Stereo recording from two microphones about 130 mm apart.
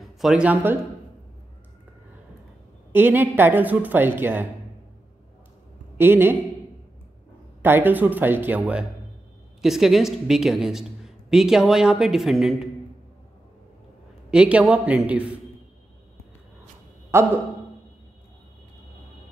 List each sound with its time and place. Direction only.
0.2 s a woman's voice: 5° right (ahead or behind)
2.9 s a woman's voice: 15° right (ahead or behind)
5.9 s a woman's voice: 15° right (ahead or behind)
7.6 s a woman's voice: 15° right (ahead or behind)
14.3 s a woman's voice: 10° right (ahead or behind)
17.1 s speech: 20° right (ahead or behind)